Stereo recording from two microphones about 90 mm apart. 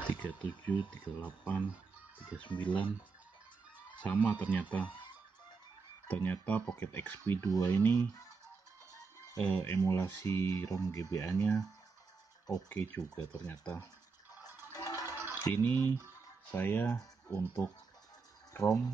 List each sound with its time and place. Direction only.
0.0 s speech: 15° left (ahead or behind)
2.1 s speech: 65° left (ahead or behind)
4.0 s speech: 20° left (ahead or behind)
6.0 s speech: 20° left (ahead or behind)
7.5 s speech: 40° left (ahead or behind)
7.8 s speech: 25° left (ahead or behind)
9.4 s speech: 15° left (ahead or behind)
9.8 s speech: 30° left (ahead or behind)
11.3 s speech: 15° left (ahead or behind)
12.6 s speech: 20° left (ahead or behind)
14.7 s music: 40° left (ahead or behind)
15.6 s speech: 25° left (ahead or behind)
18.5 s a sound: 35° left (ahead or behind)